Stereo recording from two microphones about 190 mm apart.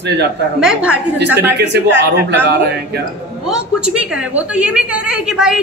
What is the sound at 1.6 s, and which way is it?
A man's voice, 65° right (ahead or behind).